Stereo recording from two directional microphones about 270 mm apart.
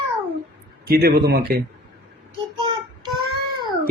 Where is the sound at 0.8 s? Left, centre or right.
Right.